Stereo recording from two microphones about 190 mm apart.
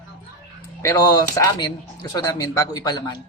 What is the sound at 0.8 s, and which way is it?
Speech, 20° left (ahead or behind).